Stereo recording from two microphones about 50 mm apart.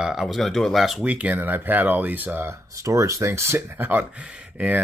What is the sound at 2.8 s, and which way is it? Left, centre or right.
Speech, right.